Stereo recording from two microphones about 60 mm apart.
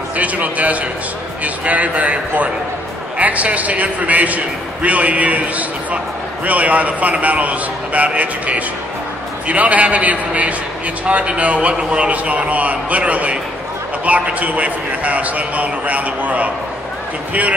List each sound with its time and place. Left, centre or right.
0.1 s a man's voice: right